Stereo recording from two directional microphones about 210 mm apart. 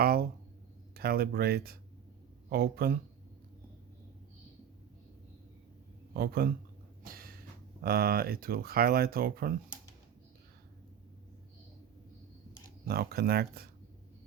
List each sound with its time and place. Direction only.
0.0 s speech: 45° right (ahead or behind)
6.1 s speech: 45° right (ahead or behind)
7.0 s a sound: 45° right (ahead or behind)
7.8 s speech: 45° right (ahead or behind)
12.9 s speech: 45° right (ahead or behind)